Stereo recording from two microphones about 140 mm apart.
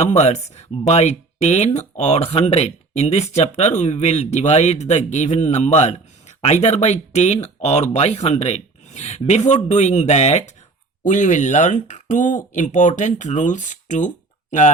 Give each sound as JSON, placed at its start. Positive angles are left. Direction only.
{"t": 0.0, "sound": "speech", "side_deg": 50}